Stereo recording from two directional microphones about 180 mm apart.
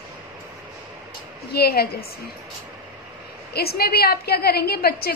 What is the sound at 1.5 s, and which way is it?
Speech, 60° left (ahead or behind).